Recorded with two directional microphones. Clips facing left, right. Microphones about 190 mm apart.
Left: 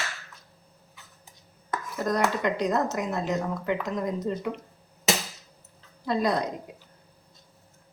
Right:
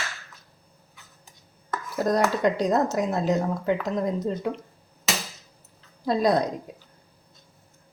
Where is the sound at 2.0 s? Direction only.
35° right (ahead or behind).